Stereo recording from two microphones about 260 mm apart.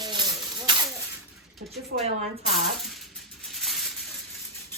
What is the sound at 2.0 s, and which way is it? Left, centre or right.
Speech, right.